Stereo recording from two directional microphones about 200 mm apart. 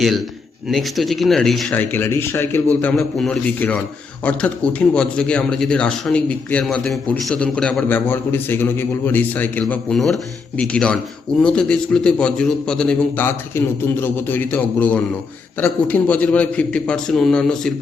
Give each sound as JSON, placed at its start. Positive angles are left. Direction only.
{"t": 0.7, "sound": "a man's voice", "side_deg": 0}